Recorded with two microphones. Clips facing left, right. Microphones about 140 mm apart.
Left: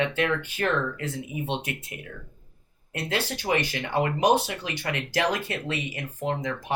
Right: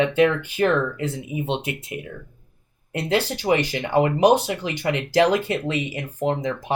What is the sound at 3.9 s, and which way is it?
Speech, 25° right (ahead or behind).